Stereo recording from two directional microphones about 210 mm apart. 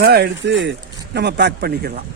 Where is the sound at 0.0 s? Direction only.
50° right (ahead or behind).